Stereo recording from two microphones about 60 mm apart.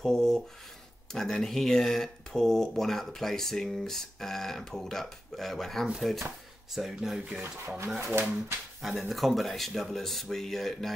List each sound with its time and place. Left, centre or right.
0.0 s speech: centre
7.4 s speech: right
9.1 s speech: centre